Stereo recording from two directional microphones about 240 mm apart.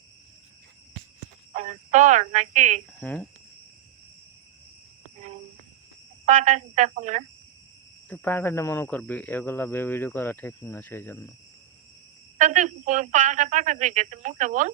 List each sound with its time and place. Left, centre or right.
1.5 s speech: right
3.0 s speech: centre
6.2 s speech: right
8.1 s speech: centre
12.4 s speech: right